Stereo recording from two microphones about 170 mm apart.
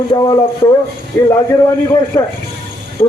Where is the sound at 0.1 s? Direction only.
25° left (ahead or behind).